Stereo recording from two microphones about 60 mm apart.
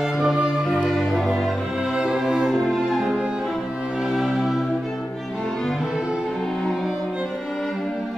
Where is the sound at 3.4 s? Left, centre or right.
Centre.